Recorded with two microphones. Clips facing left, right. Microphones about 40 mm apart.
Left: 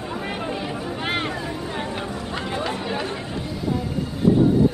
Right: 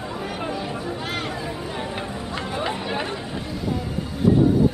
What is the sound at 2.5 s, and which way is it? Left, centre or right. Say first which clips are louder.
Chatter: right 1 dB; centre.